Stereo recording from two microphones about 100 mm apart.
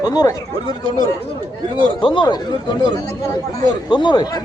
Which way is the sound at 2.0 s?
50° left (ahead or behind).